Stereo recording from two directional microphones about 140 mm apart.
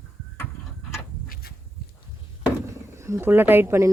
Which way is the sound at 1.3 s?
90° left.